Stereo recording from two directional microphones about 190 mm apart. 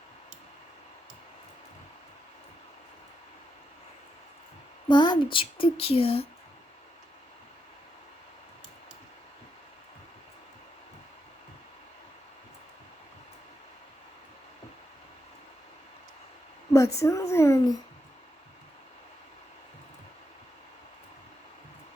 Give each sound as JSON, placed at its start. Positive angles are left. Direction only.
{"t": 4.9, "sound": "speech", "side_deg": 25}
{"t": 16.7, "sound": "speech", "side_deg": 15}